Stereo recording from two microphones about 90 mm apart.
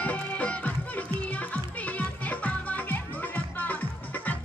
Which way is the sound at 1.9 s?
15° left (ahead or behind).